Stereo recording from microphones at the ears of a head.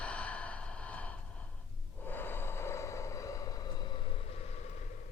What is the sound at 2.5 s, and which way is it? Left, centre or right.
Vehicle, left.